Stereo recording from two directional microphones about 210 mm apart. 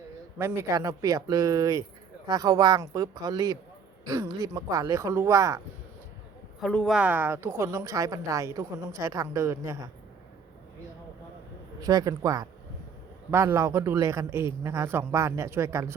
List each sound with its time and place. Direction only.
0.3 s speech: 10° right (ahead or behind)
6.6 s speech: centre (ahead or behind); by 9.7 s 15° right (ahead or behind)
11.8 s speech: 15° right (ahead or behind)